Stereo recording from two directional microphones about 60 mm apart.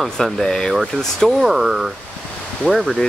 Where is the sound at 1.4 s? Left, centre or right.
Centre.